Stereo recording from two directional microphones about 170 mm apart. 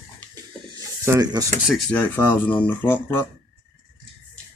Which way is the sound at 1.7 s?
10° left (ahead or behind).